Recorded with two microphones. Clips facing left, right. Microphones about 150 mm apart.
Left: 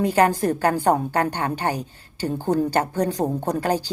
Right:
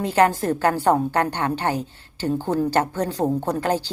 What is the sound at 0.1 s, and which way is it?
A woman's voice, 10° left (ahead or behind).